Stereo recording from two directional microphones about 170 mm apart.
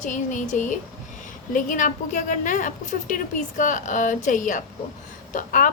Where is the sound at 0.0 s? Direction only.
50° left (ahead or behind).